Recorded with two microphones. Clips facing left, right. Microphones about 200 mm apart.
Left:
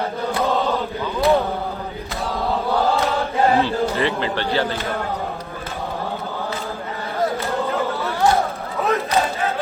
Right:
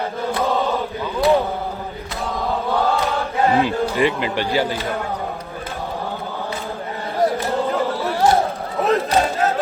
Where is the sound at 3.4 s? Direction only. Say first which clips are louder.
Right 1 dB; 15° right (ahead or behind).